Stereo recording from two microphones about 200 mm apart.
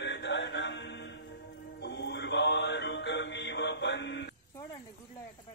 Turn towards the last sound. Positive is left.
turn(degrees=60)  # may be behind; listen again after turning